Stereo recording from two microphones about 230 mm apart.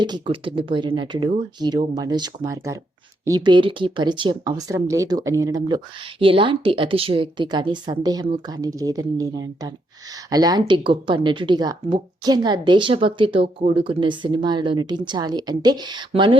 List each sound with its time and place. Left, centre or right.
0.0 s speech: right